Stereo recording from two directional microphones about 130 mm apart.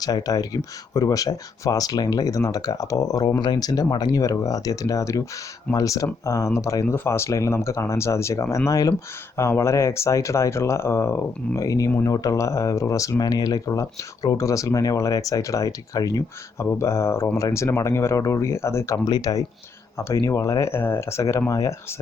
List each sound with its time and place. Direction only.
0.0 s speech: 30° left (ahead or behind)